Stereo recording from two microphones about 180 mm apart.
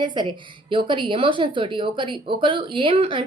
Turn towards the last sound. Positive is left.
turn(degrees=-30)  # may be behind; listen again after turning